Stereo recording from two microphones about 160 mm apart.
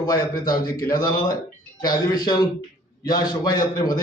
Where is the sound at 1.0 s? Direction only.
20° left (ahead or behind).